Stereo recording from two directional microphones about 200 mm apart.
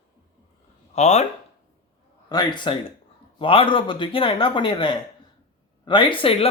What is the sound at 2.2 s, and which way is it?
Speech, 20° left (ahead or behind).